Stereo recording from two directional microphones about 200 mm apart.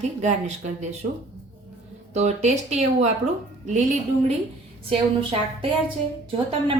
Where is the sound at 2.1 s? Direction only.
35° right (ahead or behind).